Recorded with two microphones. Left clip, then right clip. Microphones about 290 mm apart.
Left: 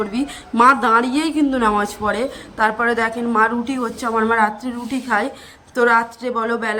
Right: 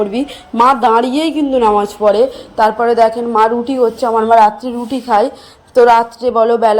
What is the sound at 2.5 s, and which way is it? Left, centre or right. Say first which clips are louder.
A woman's voice: right 7 dB; centre.